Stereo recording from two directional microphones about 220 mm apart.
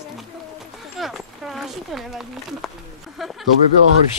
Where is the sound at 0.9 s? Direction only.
Centre (ahead or behind).